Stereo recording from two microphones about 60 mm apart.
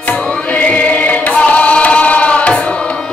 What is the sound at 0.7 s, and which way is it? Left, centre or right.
Music, left.